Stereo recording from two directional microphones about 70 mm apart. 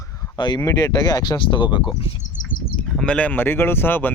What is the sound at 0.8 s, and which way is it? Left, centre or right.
Speech, left.